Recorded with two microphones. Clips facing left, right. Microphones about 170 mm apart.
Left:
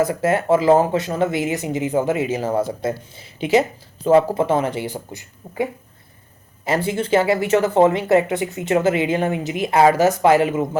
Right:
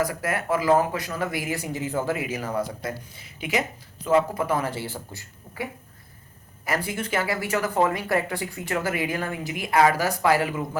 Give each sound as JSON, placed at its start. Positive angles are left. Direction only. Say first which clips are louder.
{"t": 0.0, "sound": "speech", "louder": "left 8 dB", "side_deg": 25}
{"t": 6.7, "sound": "speech", "louder": "left 8 dB", "side_deg": 25}